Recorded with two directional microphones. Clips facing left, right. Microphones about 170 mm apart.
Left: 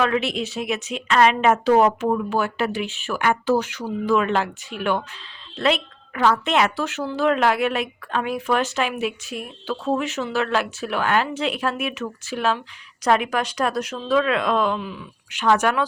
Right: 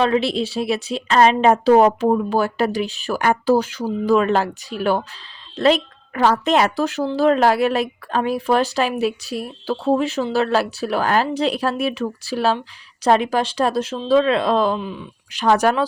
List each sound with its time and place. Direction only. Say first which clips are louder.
0.0 s a woman's voice: right 4 dB; 30° right (ahead or behind)